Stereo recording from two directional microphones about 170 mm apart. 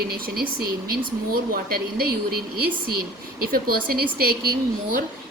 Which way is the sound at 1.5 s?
60° right (ahead or behind).